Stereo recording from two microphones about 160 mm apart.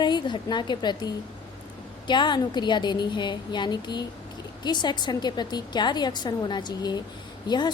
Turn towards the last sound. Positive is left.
turn(degrees=25)  # may be behind; listen again after turning